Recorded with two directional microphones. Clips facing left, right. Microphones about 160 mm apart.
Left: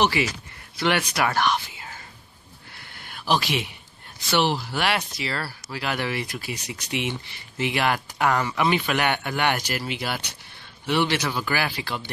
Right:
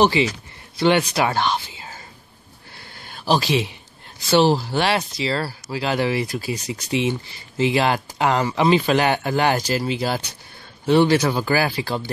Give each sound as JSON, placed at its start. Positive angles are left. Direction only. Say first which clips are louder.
{"t": 0.2, "sound": "speech", "louder": "right 5 dB", "side_deg": -25}
{"t": 3.1, "sound": "speech", "louder": "right 4 dB", "side_deg": -30}